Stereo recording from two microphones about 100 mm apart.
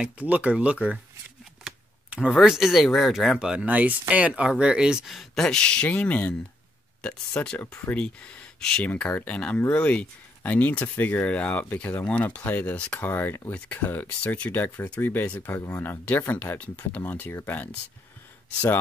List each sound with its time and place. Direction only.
0.0 s speech: 15° right (ahead or behind)
2.0 s a sound: 10° right (ahead or behind)
2.3 s speech: 5° right (ahead or behind); by 8.0 s 20° left (ahead or behind)
8.0 s speech: 10° left (ahead or behind)